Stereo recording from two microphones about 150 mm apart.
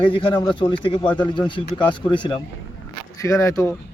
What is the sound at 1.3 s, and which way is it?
Speech, 30° left (ahead or behind).